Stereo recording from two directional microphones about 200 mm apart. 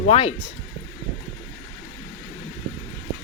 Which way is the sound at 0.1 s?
30° left (ahead or behind).